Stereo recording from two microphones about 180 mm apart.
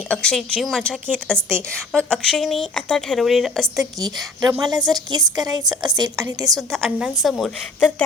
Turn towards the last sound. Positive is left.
turn(degrees=0)  # may be behind; listen again after turning